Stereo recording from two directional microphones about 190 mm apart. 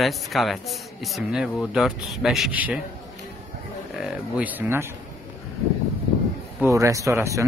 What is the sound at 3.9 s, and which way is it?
Speech, 5° right (ahead or behind).